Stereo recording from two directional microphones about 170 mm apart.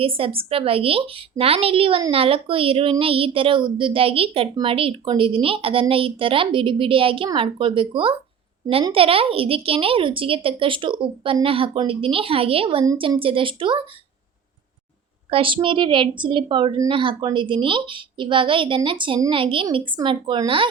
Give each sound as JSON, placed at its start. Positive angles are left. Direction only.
{"t": 0.0, "sound": "a woman's voice", "side_deg": -35}
{"t": 15.3, "sound": "a woman's voice", "side_deg": -30}